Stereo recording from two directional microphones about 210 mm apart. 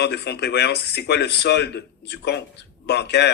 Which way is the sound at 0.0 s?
50° left (ahead or behind).